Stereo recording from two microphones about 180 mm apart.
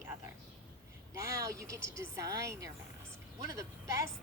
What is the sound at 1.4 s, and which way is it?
A woman's voice, 15° right (ahead or behind).